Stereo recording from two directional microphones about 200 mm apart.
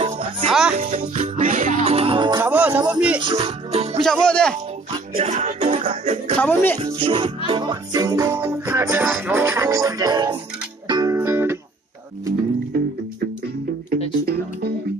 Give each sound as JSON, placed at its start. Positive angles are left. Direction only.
{"t": 0.0, "sound": "music", "side_deg": -30}
{"t": 0.5, "sound": "music", "side_deg": -5}
{"t": 0.7, "sound": "music", "side_deg": -40}
{"t": 2.4, "sound": "music", "side_deg": -5}
{"t": 3.2, "sound": "speech", "side_deg": -25}
{"t": 4.0, "sound": "speech", "side_deg": 5}
{"t": 5.1, "sound": "music", "side_deg": -35}
{"t": 6.4, "sound": "speech", "side_deg": 10}
{"t": 6.8, "sound": "music", "side_deg": -25}